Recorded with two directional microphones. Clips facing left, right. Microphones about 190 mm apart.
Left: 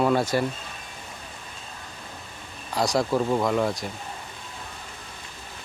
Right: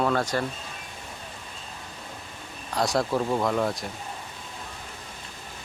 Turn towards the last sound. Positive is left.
turn(degrees=0)  # may be behind; listen again after turning